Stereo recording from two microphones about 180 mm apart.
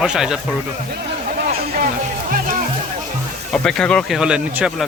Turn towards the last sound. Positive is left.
turn(degrees=-5)  # may be behind; listen again after turning